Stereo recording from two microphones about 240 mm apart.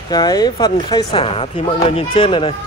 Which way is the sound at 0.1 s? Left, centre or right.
Centre.